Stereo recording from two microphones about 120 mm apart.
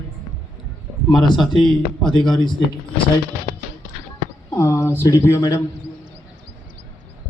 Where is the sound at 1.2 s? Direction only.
40° left (ahead or behind).